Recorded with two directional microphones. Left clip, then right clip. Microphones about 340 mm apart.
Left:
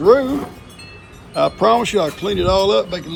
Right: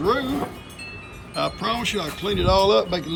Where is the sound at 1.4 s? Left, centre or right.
Centre.